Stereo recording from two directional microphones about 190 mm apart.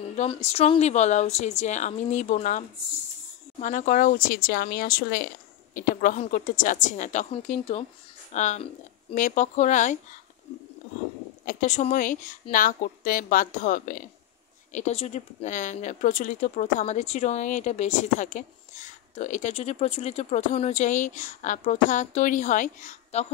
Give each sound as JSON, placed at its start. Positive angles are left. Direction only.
{"t": 0.2, "sound": "a woman's voice", "side_deg": 35}
{"t": 11.4, "sound": "a woman's voice", "side_deg": 40}